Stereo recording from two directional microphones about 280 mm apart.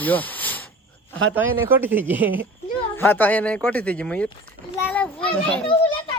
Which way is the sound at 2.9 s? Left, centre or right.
Centre.